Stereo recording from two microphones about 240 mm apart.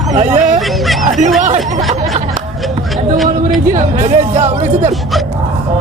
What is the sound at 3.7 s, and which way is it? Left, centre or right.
Speech, right.